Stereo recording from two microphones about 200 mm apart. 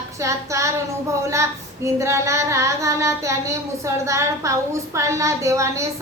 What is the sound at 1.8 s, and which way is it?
A woman's voice, 15° right (ahead or behind).